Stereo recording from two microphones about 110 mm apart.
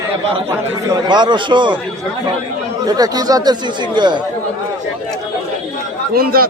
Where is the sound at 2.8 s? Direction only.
35° right (ahead or behind).